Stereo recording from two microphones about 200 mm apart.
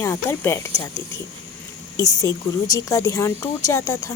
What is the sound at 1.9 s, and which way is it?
A woman's voice, 15° left (ahead or behind).